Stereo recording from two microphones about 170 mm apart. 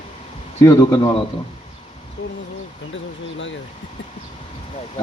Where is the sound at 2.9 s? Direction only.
90° left.